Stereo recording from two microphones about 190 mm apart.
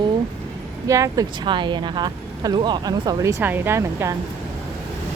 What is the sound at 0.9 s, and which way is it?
Speech, 15° right (ahead or behind).